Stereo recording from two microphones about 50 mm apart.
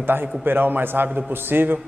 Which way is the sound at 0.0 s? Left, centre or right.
Right.